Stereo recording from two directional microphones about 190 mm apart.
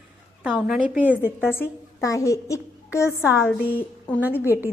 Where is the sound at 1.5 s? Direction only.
15° left (ahead or behind).